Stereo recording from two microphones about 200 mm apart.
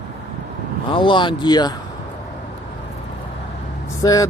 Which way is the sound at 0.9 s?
25° left (ahead or behind).